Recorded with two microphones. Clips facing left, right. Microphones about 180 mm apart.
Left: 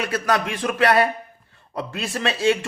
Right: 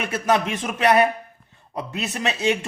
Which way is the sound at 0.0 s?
25° right (ahead or behind).